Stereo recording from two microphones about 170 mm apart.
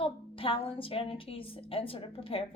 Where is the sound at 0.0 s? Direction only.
35° left (ahead or behind).